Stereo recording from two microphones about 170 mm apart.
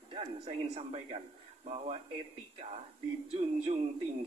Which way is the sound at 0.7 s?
40° right (ahead or behind).